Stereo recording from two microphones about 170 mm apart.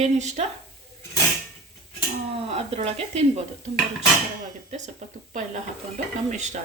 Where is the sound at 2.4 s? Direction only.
40° right (ahead or behind).